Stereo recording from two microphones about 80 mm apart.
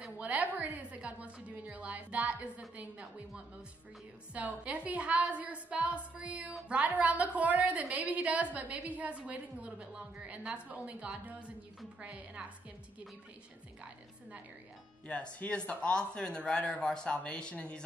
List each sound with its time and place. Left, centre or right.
0.2 s a sound: centre
6.7 s a woman's voice: centre
15.0 s speech: centre